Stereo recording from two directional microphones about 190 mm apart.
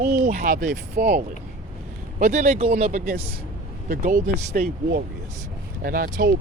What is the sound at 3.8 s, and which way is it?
Speech, 45° right (ahead or behind).